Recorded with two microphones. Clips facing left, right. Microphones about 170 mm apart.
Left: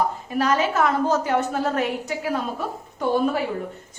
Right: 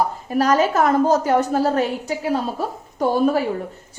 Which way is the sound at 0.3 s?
40° right (ahead or behind).